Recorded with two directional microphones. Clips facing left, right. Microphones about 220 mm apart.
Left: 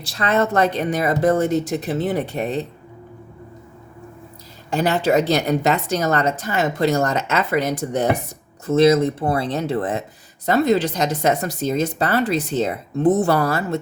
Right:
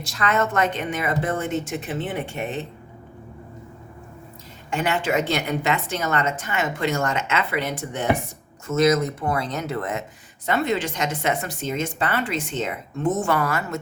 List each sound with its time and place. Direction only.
0.0 s a woman's voice: 35° left (ahead or behind)
4.7 s a woman's voice: 35° left (ahead or behind)